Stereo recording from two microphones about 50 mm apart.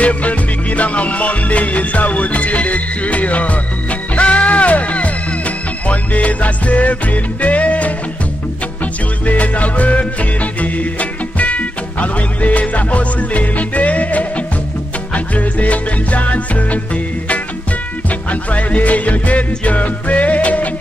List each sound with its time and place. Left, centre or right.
0.0 s music: left
9.2 s music: left